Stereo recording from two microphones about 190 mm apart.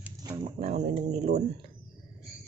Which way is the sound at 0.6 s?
40° right (ahead or behind).